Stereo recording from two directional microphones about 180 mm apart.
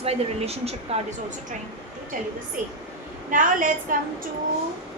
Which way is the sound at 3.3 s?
50° right (ahead or behind).